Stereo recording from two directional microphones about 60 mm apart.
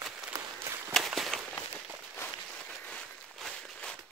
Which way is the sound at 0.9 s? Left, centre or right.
Centre.